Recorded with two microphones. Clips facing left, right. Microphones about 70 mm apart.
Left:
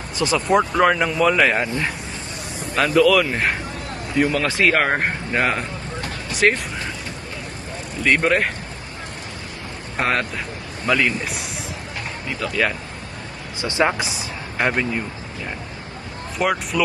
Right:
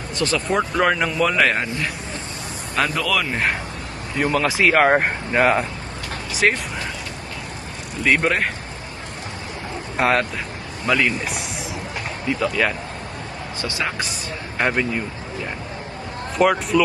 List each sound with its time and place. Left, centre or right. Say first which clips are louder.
0.3 s speech: left 4 dB; centre
2.7 s speech: left 6 dB; centre
8.0 s speech: left 1 dB; centre
10.0 s speech: right 2 dB; centre
13.6 s speech: left 7 dB; left
14.6 s speech: even; centre
16.4 s speech: right 4 dB; centre